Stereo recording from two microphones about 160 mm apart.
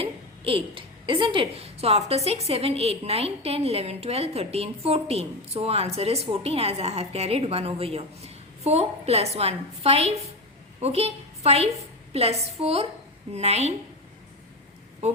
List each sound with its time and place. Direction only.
0.0 s a woman's voice: 35° right (ahead or behind)
15.0 s speech: 45° right (ahead or behind)